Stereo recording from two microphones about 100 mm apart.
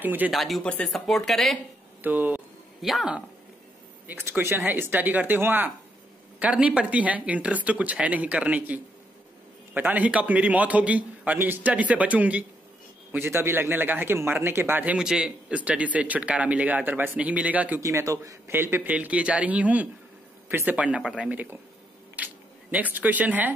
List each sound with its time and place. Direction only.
0.0 s speech: 20° right (ahead or behind)
0.3 s speech: centre (ahead or behind)
2.0 s speech: 15° right (ahead or behind)
2.8 s speech: centre (ahead or behind)
4.1 s a man's voice: 25° right (ahead or behind)
15.0 s speech: 5° right (ahead or behind)
17.7 s speech: 30° right (ahead or behind)